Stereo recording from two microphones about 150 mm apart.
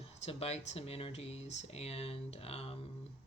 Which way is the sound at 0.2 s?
45° left (ahead or behind).